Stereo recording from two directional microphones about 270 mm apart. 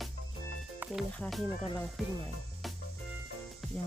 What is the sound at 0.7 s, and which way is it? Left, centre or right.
Speech, centre.